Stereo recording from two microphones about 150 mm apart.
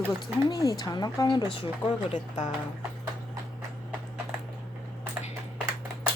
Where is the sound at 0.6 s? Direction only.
25° left (ahead or behind).